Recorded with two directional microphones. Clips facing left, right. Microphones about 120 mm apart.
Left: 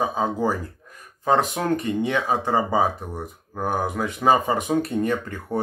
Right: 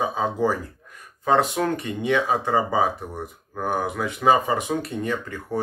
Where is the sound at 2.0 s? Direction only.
35° left (ahead or behind).